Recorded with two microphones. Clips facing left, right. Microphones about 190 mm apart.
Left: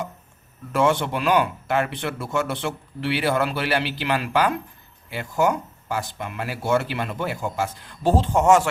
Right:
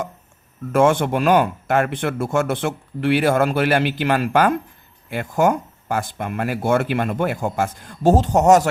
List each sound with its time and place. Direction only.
0.7 s speech: 50° right (ahead or behind)